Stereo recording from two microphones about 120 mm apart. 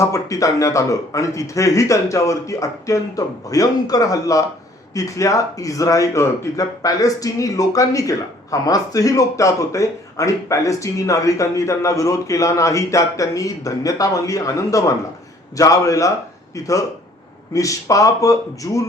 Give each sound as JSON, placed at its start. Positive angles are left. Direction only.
{"t": 0.0, "sound": "speech", "side_deg": 25}